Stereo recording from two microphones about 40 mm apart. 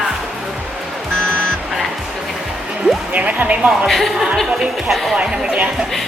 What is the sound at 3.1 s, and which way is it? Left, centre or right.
Music, right.